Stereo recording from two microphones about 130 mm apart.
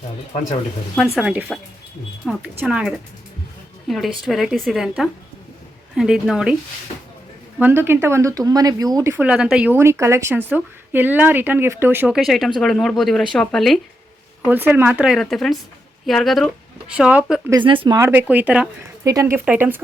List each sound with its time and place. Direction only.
0.9 s speech: centre (ahead or behind)
1.3 s a woman's voice: 10° right (ahead or behind)
2.6 s speech: 5° right (ahead or behind)
7.6 s speech: 15° right (ahead or behind)
9.1 s a woman's voice: 10° right (ahead or behind)
12.1 s speech: centre (ahead or behind)
14.4 s a woman's voice: 15° right (ahead or behind)
15.2 s speech: centre (ahead or behind)
16.9 s a woman's voice: 10° right (ahead or behind)
17.6 s speech: 40° right (ahead or behind)
18.1 s a woman's voice: 15° right (ahead or behind)
19.0 s speech: 25° right (ahead or behind)
19.5 s a woman's voice: 15° right (ahead or behind)